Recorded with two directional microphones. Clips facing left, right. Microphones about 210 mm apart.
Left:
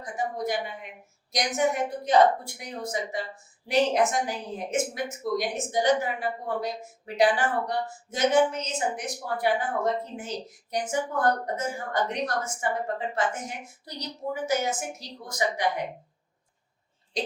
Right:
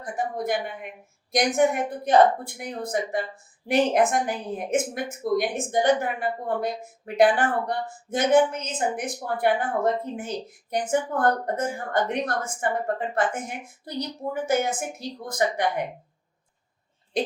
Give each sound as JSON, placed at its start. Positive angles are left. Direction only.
{"t": 0.0, "sound": "a woman's voice", "side_deg": -55}
{"t": 17.2, "sound": "a woman's voice", "side_deg": -55}